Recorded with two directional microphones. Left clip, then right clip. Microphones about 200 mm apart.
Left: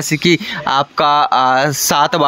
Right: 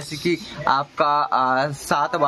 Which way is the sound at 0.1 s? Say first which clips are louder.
Left 10 dB; 30° left (ahead or behind).